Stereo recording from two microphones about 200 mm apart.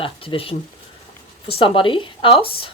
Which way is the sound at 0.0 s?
25° left (ahead or behind).